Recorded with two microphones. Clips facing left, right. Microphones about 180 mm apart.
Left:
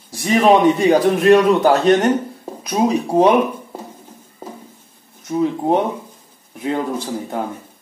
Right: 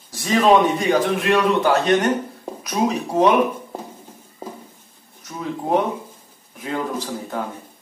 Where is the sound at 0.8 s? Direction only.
40° left (ahead or behind).